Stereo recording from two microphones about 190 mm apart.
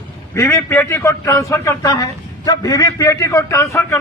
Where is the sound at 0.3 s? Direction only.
15° left (ahead or behind).